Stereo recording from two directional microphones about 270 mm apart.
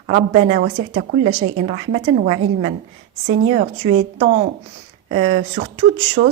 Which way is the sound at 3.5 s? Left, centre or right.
Right.